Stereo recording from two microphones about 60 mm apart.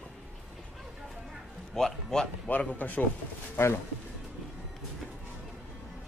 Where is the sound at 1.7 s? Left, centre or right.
Centre.